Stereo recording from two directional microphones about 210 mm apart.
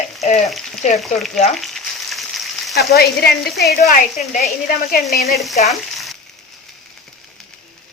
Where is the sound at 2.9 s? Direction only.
50° left (ahead or behind).